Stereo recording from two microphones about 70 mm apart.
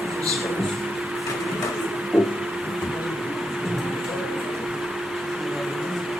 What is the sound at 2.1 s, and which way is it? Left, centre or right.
Vehicle, centre.